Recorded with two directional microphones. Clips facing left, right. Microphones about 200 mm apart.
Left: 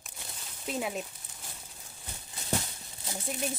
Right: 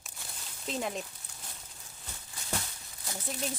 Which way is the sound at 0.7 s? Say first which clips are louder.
Left 1 dB; 5° left (ahead or behind).